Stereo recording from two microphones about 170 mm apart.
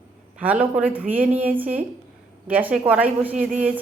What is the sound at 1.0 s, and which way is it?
Speech, 50° right (ahead or behind).